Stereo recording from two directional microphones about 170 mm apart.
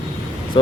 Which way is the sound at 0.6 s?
30° left (ahead or behind).